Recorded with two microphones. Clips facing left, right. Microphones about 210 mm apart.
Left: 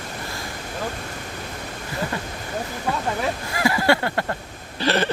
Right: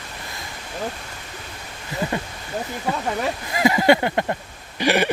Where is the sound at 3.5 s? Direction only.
20° right (ahead or behind).